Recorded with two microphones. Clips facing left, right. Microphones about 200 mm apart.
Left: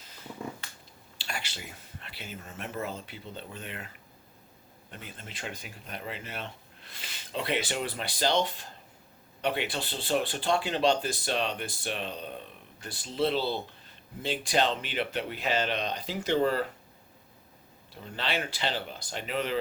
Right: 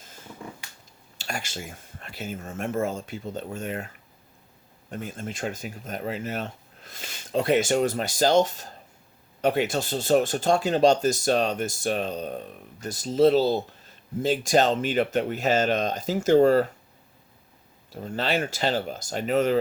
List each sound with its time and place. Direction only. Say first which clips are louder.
1.2 s speech: right 6 dB; 45° right (ahead or behind)
4.9 s speech: right 12 dB; 45° right (ahead or behind)
17.9 s speech: right 7 dB; 45° right (ahead or behind)